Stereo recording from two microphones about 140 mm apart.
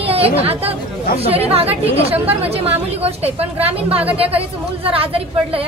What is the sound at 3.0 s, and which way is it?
A woman's voice, 45° right (ahead or behind).